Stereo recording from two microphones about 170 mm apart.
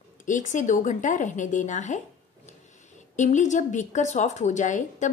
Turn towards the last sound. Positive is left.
turn(degrees=45)  # may be behind; listen again after turning